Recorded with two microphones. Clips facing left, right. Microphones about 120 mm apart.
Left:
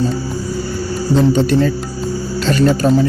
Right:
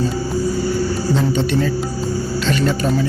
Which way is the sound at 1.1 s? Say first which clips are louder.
Left 7 dB; 40° left (ahead or behind).